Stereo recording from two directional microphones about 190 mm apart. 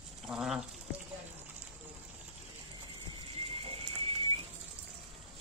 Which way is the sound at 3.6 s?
30° right (ahead or behind).